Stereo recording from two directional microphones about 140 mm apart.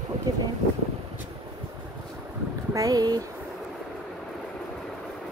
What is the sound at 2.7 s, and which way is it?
Speech, 25° right (ahead or behind).